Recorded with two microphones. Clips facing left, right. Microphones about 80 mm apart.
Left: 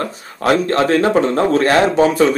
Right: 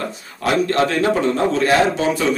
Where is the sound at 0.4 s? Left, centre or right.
Left.